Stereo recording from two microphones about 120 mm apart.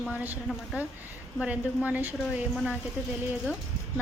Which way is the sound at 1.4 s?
10° right (ahead or behind).